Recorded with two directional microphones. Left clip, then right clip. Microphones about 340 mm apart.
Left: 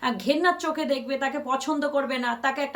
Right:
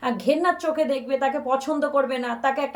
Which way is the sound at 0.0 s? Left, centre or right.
Centre.